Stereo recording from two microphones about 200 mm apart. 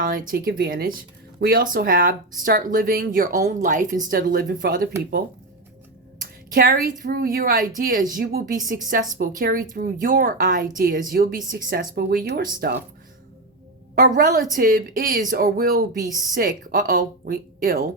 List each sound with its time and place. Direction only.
0.1 s speech: 45° right (ahead or behind)
6.1 s a sound: 45° right (ahead or behind)
7.0 s speech: 45° right (ahead or behind)
14.0 s speech: 45° right (ahead or behind)